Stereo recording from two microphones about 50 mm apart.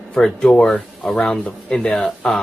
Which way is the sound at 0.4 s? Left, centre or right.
Left.